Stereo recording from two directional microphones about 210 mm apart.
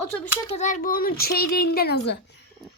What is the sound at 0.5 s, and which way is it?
Speech, 35° left (ahead or behind).